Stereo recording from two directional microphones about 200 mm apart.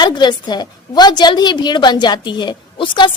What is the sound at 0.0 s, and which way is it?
A woman's voice, 20° left (ahead or behind).